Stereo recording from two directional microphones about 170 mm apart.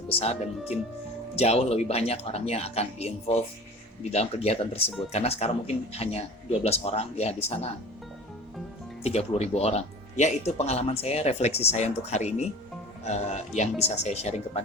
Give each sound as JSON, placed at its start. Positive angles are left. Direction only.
{"t": 0.1, "sound": "speech", "side_deg": 35}
{"t": 9.0, "sound": "speech", "side_deg": 40}